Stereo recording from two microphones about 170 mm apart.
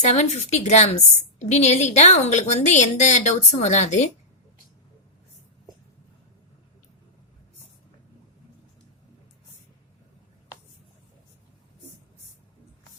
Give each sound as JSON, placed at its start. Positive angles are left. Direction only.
{"t": 0.0, "sound": "a woman's voice", "side_deg": 45}